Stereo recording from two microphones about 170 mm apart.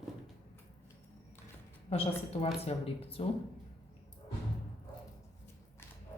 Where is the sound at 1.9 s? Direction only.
35° left (ahead or behind).